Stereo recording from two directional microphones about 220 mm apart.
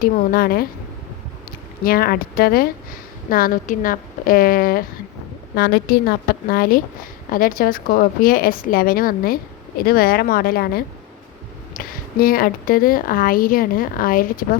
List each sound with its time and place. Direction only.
0.0 s a woman's voice: 40° left (ahead or behind)
1.8 s a woman's voice: 40° left (ahead or behind)